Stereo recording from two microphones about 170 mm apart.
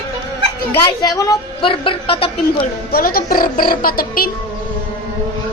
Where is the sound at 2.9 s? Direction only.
60° left (ahead or behind).